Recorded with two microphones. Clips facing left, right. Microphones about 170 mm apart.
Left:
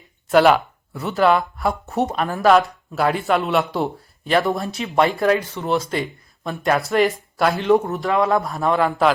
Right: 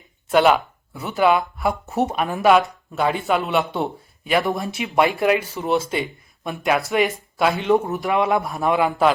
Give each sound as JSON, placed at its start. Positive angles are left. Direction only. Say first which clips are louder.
{"t": 0.3, "sound": "speech", "louder": "left 2 dB", "side_deg": 0}
{"t": 8.0, "sound": "speech", "louder": "left 1 dB", "side_deg": -20}
{"t": 8.4, "sound": "speech", "louder": "left 1 dB", "side_deg": 0}
{"t": 8.6, "sound": "speech", "louder": "even", "side_deg": -10}